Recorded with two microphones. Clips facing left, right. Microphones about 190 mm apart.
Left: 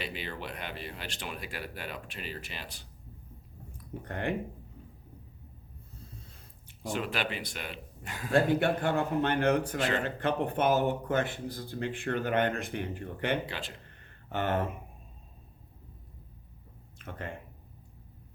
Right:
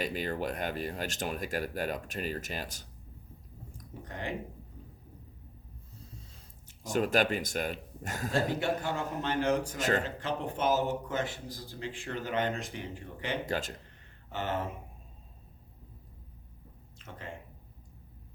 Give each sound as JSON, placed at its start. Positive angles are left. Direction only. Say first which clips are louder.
{"t": 0.0, "sound": "speech", "louder": "right 6 dB", "side_deg": -45}
{"t": 4.0, "sound": "a man's voice", "louder": "left 5 dB", "side_deg": 60}
{"t": 6.8, "sound": "speech", "louder": "right 5 dB", "side_deg": -45}
{"t": 8.3, "sound": "a man's voice", "louder": "left 5 dB", "side_deg": 55}
{"t": 9.7, "sound": "speech", "louder": "even", "side_deg": -45}
{"t": 10.0, "sound": "a man's voice", "louder": "left 4 dB", "side_deg": 60}
{"t": 13.4, "sound": "speech", "louder": "right 6 dB", "side_deg": -45}
{"t": 14.3, "sound": "speech", "louder": "left 4 dB", "side_deg": 55}
{"t": 17.0, "sound": "speech", "louder": "left 4 dB", "side_deg": 55}